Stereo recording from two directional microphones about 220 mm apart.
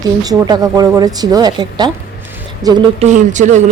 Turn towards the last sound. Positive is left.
turn(degrees=-35)  # may be behind; listen again after turning